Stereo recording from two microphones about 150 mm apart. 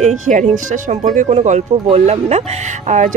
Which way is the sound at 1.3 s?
50° right (ahead or behind).